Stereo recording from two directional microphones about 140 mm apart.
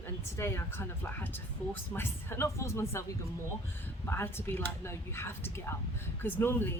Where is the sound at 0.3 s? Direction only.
20° left (ahead or behind).